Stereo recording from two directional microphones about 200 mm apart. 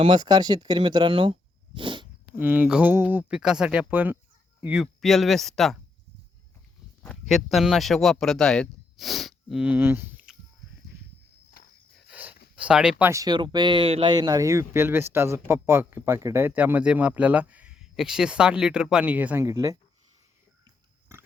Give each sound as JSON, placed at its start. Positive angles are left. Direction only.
{"t": 0.0, "sound": "speech", "side_deg": -20}
{"t": 2.4, "sound": "speech", "side_deg": -10}
{"t": 7.0, "sound": "speech", "side_deg": 5}
{"t": 11.9, "sound": "dog", "side_deg": -5}
{"t": 12.5, "sound": "speech", "side_deg": -5}
{"t": 21.1, "sound": "pig", "side_deg": -15}